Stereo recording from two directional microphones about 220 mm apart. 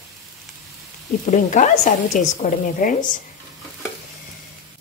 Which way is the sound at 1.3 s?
35° left (ahead or behind).